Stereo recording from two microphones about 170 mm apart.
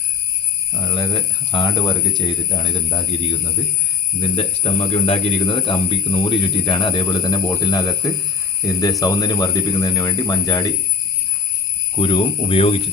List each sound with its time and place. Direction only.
0.7 s speech: 20° left (ahead or behind)
11.9 s speech: 30° left (ahead or behind)